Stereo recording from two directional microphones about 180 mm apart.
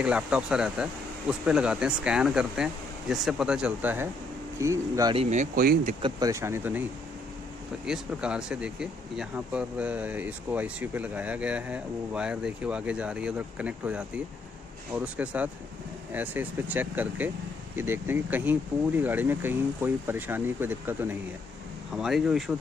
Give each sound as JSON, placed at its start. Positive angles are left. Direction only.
{"t": 0.0, "sound": "speech", "side_deg": -5}
{"t": 5.1, "sound": "speech", "side_deg": -40}
{"t": 6.0, "sound": "speech", "side_deg": -20}
{"t": 7.8, "sound": "speech", "side_deg": -5}